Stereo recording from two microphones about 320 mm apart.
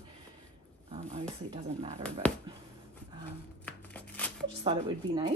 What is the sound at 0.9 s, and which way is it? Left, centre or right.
Speech, centre.